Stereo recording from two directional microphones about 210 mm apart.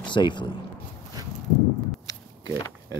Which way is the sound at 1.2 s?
15° right (ahead or behind).